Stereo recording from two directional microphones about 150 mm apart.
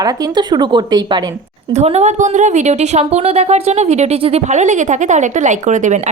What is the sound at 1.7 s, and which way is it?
A woman's voice, 45° right (ahead or behind).